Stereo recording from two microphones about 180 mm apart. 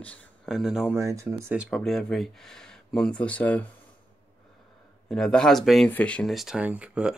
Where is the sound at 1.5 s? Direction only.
Centre (ahead or behind).